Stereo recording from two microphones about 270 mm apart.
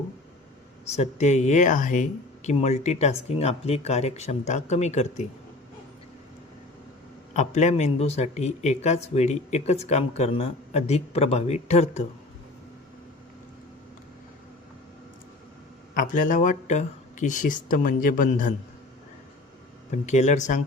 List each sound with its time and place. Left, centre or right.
0.9 s speech: left
7.3 s speech: left
16.0 s speech: left
19.9 s speech: left